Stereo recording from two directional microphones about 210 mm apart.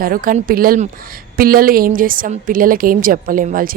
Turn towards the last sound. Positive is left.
turn(degrees=-40)  # may be behind; listen again after turning